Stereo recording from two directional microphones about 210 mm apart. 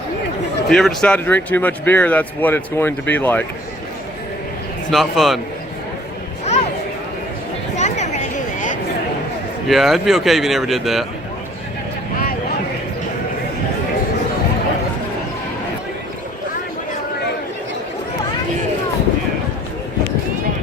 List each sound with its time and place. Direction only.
0.7 s speech: centre (ahead or behind)
4.9 s speech: centre (ahead or behind)
7.8 s a sound: 35° left (ahead or behind)
9.6 s speech: centre (ahead or behind)